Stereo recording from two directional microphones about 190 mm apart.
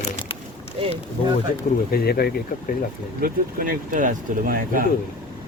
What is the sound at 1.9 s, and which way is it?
Speech, 55° left (ahead or behind).